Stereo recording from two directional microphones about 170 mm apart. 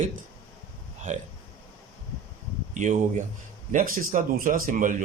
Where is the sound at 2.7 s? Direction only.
45° right (ahead or behind).